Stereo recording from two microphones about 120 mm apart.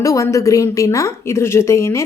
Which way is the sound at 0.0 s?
25° left (ahead or behind).